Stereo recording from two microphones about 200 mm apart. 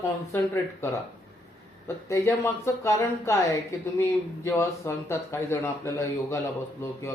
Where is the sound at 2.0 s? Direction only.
15° left (ahead or behind).